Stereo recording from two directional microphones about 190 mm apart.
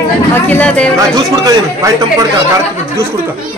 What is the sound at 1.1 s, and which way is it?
Speech, 20° right (ahead or behind).